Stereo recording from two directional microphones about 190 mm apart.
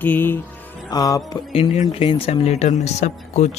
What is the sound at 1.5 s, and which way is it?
Speech, 30° left (ahead or behind).